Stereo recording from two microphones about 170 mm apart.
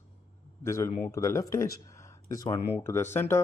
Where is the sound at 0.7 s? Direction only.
15° left (ahead or behind).